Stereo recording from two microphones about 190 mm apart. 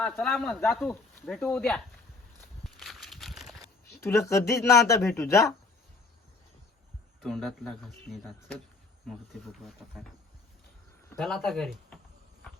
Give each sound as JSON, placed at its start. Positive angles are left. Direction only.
{"t": 0.0, "sound": "speech", "side_deg": 0}
{"t": 2.6, "sound": "a sound", "side_deg": 0}
{"t": 4.3, "sound": "speech", "side_deg": 15}
{"t": 7.2, "sound": "speech", "side_deg": 0}
{"t": 11.2, "sound": "speech", "side_deg": 0}